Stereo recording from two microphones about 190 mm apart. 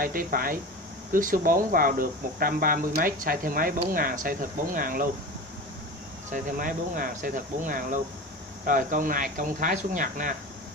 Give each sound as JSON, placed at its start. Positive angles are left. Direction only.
{"t": 0.0, "sound": "speech", "side_deg": -50}
{"t": 6.3, "sound": "speech", "side_deg": -45}